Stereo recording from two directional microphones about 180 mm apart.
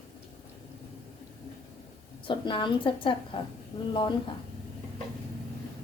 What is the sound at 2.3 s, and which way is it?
A woman's voice, 25° left (ahead or behind).